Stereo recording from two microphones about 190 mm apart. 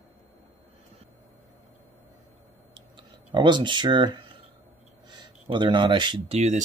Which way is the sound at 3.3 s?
25° right (ahead or behind).